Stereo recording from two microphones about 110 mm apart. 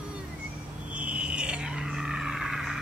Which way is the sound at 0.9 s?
10° right (ahead or behind).